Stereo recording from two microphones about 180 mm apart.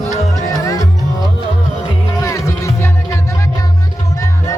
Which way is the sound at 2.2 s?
20° left (ahead or behind).